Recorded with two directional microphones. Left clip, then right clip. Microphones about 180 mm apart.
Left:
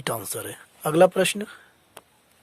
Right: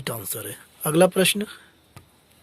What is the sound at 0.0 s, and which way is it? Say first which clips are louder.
Speech: left 3 dB; 50° left (ahead or behind).